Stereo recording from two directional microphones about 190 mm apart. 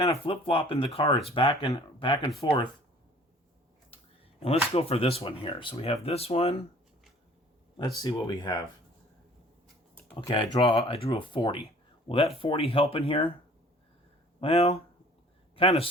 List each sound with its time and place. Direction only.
0.1 s speech: 30° left (ahead or behind)
4.4 s speech: 30° left (ahead or behind)
7.8 s speech: 20° left (ahead or behind)
10.2 s speech: 25° left (ahead or behind)
14.4 s speech: 30° left (ahead or behind)